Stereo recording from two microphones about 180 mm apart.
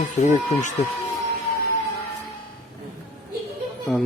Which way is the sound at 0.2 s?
40° left (ahead or behind).